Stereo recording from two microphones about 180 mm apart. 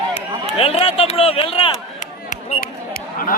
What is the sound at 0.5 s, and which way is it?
Speech, 30° left (ahead or behind).